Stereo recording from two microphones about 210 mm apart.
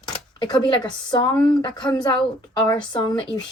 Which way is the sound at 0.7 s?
20° left (ahead or behind).